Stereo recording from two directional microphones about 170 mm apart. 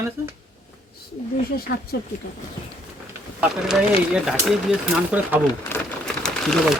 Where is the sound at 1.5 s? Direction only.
65° left (ahead or behind).